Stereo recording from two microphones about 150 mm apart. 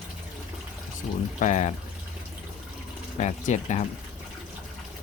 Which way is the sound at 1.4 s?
50° left (ahead or behind).